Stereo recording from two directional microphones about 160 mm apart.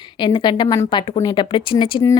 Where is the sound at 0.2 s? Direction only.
30° left (ahead or behind).